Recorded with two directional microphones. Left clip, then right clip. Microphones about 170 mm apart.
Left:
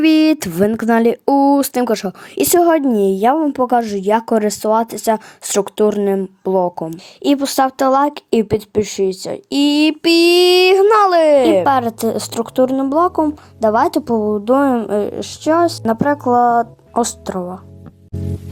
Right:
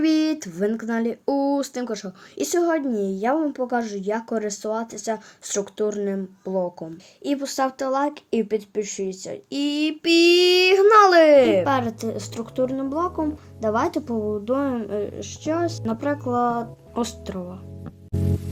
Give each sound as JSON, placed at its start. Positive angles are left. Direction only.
{"t": 0.0, "sound": "speech", "side_deg": 60}
{"t": 11.6, "sound": "speech", "side_deg": 55}